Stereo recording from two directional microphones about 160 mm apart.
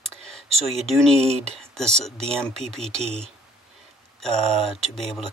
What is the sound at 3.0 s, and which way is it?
Speech, 40° right (ahead or behind).